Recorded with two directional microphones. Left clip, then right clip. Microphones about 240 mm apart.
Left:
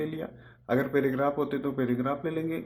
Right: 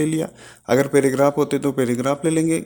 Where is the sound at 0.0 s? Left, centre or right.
Right.